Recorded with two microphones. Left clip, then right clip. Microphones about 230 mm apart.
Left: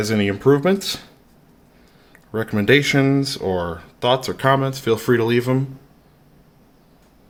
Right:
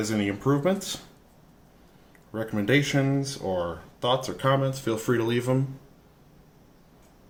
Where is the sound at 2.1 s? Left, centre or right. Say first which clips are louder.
Left 8 dB; left.